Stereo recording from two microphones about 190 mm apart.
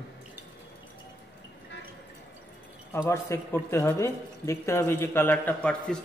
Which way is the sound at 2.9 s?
15° left (ahead or behind).